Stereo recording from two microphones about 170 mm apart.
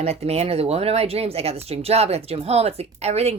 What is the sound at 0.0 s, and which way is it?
Speech, 40° right (ahead or behind).